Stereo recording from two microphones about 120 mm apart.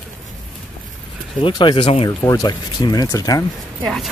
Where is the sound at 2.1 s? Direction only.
30° left (ahead or behind).